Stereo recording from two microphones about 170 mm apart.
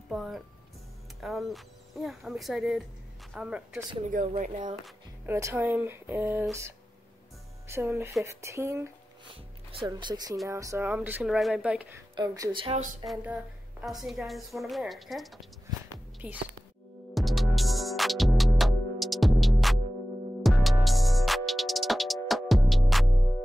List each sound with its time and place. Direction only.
0.1 s a woman's voice: centre (ahead or behind)
4.0 s speech: 50° right (ahead or behind)
5.2 s speech: 15° right (ahead or behind)
7.6 s speech: 15° right (ahead or behind)
9.3 s speech: 30° right (ahead or behind); by 12.0 s 10° right (ahead or behind)
12.2 s speech: 30° right (ahead or behind)
13.0 s a woman's voice: centre (ahead or behind)
17.1 s music: centre (ahead or behind)